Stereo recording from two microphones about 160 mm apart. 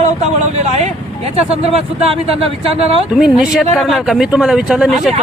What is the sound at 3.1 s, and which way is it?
Speech, 5° right (ahead or behind).